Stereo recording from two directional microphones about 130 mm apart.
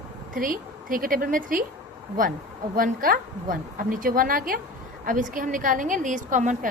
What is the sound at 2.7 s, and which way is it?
A woman's voice, 90° right.